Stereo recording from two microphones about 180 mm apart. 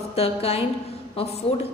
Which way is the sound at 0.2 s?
35° left (ahead or behind).